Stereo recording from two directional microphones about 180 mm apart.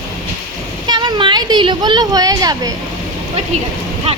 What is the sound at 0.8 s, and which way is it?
A woman's voice, 25° right (ahead or behind).